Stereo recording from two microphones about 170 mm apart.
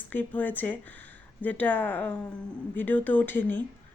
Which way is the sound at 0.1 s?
10° left (ahead or behind).